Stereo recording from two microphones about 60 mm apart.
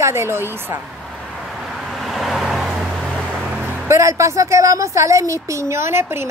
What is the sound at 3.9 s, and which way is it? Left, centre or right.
Speech, right.